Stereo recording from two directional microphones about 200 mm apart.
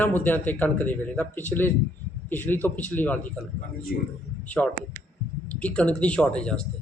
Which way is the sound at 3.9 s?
50° left (ahead or behind).